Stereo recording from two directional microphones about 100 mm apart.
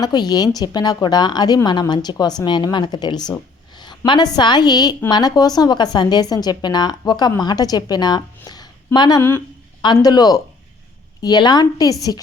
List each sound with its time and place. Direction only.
0.0 s a woman's voice: 40° left (ahead or behind)
8.4 s a sound: 40° left (ahead or behind)
9.8 s a woman's voice: 45° left (ahead or behind)